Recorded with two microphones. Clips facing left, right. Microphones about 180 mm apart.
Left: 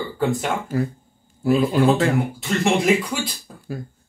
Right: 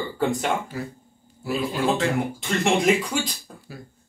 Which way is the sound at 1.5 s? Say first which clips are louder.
Left 7 dB; 45° left (ahead or behind).